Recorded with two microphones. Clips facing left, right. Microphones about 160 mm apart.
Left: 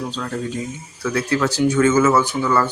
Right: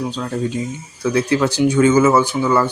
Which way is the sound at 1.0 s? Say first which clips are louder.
Right 3 dB; 20° right (ahead or behind).